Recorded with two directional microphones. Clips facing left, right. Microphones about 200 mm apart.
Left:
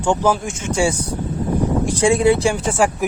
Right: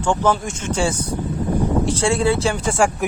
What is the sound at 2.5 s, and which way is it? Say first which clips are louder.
Speech: left 1 dB; 5° left (ahead or behind).